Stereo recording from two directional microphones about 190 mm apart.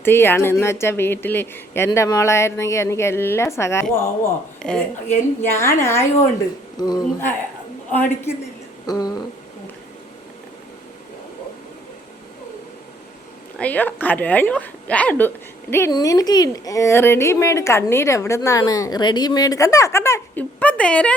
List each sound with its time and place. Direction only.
0.0 s speech: 10° left (ahead or behind)
13.6 s speech: 10° left (ahead or behind)